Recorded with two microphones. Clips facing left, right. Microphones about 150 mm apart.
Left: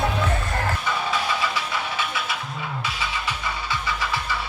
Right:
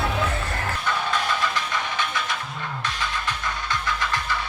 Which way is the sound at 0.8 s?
5° left (ahead or behind).